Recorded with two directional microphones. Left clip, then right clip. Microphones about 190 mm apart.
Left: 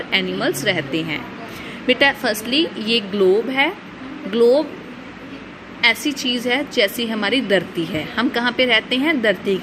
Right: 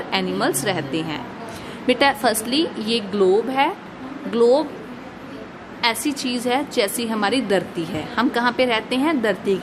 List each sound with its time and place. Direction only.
0.1 s a woman's voice: 5° right (ahead or behind)
5.8 s a woman's voice: centre (ahead or behind)